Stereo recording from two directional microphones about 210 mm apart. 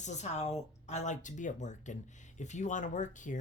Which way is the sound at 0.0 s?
35° left (ahead or behind).